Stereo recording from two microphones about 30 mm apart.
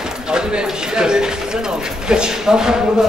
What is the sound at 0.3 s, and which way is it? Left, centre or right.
A man's voice, right.